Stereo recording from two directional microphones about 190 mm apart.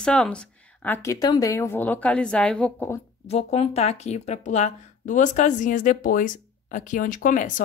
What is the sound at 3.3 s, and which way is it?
Speech, 35° left (ahead or behind).